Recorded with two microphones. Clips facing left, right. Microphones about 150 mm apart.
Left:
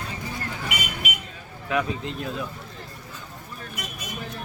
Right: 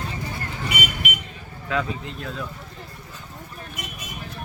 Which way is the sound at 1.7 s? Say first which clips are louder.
Left 1 dB; 20° left (ahead or behind).